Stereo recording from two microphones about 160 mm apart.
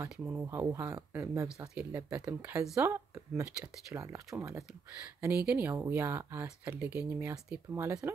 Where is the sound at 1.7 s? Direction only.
5° right (ahead or behind).